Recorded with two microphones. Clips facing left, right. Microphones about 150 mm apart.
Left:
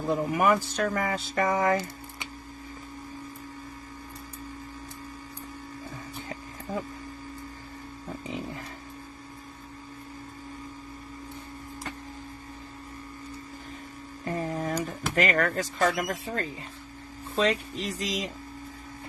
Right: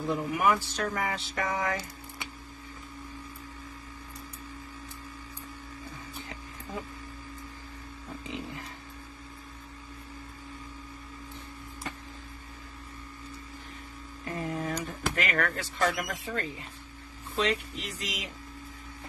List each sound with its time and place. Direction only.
0.1 s speech: 45° left (ahead or behind)
14.3 s a sound: 40° left (ahead or behind)
15.1 s speech: 40° left (ahead or behind)